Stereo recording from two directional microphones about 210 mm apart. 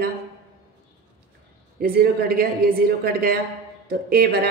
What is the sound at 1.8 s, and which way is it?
A woman's voice, 45° right (ahead or behind).